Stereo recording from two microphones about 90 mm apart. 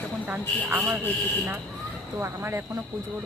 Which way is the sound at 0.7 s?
25° right (ahead or behind).